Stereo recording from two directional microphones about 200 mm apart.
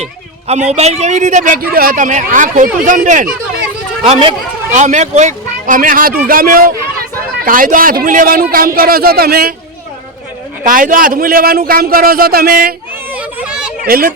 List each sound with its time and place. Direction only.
0.0 s a man's voice: 30° right (ahead or behind)
4.0 s a man's voice: 25° right (ahead or behind); by 9.6 s 50° right (ahead or behind)
10.6 s a man's voice: 40° right (ahead or behind)
13.1 s a sound: 5° right (ahead or behind)
13.8 s a man's voice: 50° right (ahead or behind)